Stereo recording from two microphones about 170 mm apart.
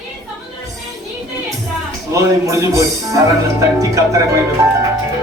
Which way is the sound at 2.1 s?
20° right (ahead or behind).